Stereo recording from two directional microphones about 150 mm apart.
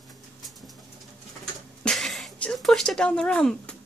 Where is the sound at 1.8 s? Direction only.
Centre (ahead or behind).